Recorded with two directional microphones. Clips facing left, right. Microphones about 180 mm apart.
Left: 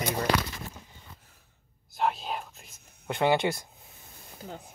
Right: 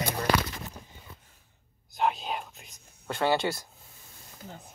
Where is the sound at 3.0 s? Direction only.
15° left (ahead or behind).